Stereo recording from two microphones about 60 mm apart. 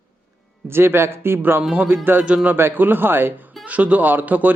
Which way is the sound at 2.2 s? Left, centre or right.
Right.